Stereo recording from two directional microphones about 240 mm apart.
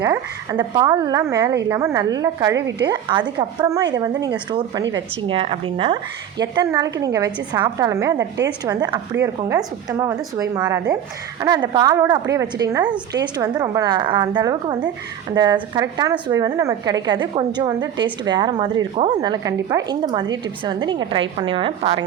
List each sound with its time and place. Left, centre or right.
0.0 s a woman's voice: centre
2.6 s a woman's voice: right
2.9 s a woman's voice: centre
5.3 s a woman's voice: right